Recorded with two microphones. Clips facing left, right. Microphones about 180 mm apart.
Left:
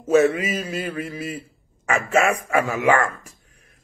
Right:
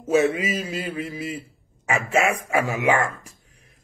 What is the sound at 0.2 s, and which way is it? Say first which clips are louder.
Mantra: left 2 dB; 20° right (ahead or behind).